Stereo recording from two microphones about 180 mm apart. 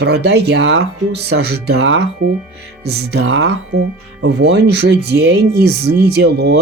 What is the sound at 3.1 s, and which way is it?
Speech, 65° right (ahead or behind).